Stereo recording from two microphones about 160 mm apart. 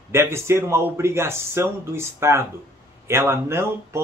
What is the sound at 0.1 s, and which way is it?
Speech, 15° right (ahead or behind).